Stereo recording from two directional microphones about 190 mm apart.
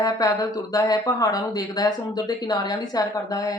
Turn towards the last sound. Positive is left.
turn(degrees=20)  # may be behind; listen again after turning